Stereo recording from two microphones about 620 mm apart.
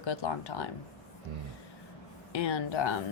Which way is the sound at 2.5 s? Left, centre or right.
Left.